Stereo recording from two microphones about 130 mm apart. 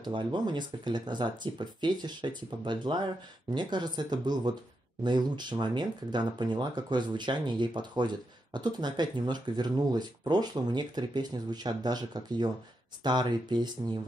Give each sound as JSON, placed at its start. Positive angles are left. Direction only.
{"t": 0.0, "sound": "speech", "side_deg": -35}